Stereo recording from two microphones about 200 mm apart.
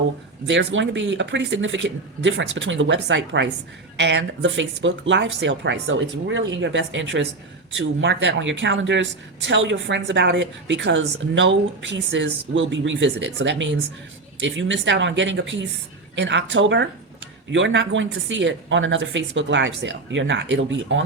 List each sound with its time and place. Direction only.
0.4 s a woman's voice: 65° right (ahead or behind)